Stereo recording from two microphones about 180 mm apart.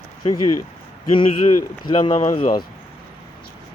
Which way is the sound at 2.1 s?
45° left (ahead or behind).